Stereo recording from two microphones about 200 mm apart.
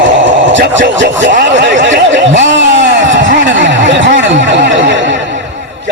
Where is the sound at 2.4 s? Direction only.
65° right (ahead or behind).